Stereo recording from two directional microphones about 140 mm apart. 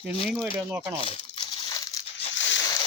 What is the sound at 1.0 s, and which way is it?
Crumpling, 40° left (ahead or behind).